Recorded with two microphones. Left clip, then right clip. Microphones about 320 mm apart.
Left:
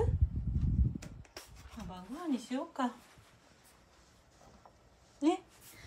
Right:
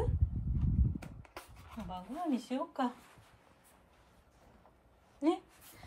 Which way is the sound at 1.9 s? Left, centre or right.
Centre.